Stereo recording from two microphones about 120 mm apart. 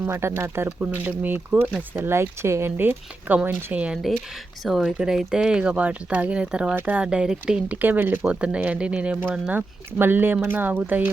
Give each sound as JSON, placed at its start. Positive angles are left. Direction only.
{"t": 0.0, "sound": "speech", "side_deg": -20}
{"t": 4.6, "sound": "speech", "side_deg": 0}